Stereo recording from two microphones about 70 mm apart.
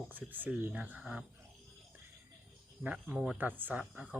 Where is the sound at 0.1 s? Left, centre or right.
Right.